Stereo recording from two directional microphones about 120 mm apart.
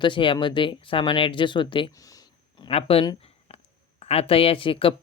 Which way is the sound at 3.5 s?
55° left (ahead or behind).